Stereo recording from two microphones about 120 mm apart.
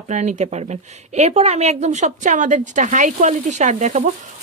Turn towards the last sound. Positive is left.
turn(degrees=-75)  # may be behind; listen again after turning